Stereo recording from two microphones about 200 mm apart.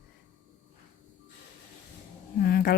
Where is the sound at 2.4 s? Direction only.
50° left (ahead or behind).